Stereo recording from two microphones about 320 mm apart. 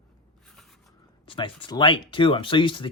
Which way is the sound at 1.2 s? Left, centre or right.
Centre.